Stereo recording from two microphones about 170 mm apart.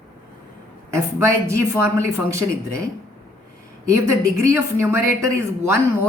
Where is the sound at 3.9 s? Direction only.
20° right (ahead or behind).